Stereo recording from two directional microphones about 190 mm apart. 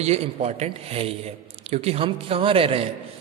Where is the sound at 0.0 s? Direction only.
35° right (ahead or behind).